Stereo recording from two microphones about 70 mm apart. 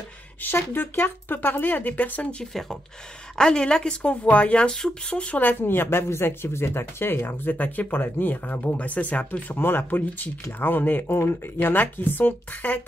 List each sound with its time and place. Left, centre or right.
0.4 s speech: left
3.3 s speech: centre